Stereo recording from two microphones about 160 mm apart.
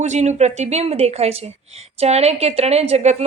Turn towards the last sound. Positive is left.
turn(degrees=-45)  # may be behind; listen again after turning